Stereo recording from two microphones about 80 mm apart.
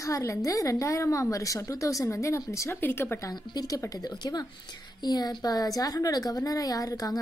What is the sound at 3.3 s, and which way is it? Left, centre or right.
Speech, left.